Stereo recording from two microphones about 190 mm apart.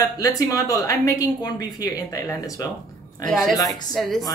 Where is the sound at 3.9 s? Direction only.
Centre (ahead or behind).